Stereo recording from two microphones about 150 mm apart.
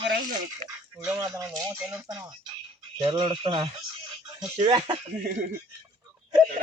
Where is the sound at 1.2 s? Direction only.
20° right (ahead or behind).